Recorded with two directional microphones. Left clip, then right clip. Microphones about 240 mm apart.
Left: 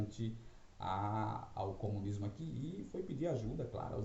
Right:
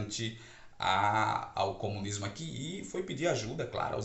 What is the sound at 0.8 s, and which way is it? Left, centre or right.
Speech, centre.